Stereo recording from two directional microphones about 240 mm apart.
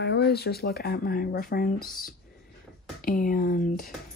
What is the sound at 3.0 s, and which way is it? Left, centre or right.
Speech, left.